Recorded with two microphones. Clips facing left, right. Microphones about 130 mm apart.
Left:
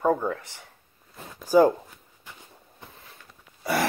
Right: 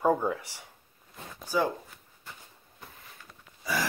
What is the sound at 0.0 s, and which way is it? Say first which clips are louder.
Speech: left 2 dB; 10° right (ahead or behind).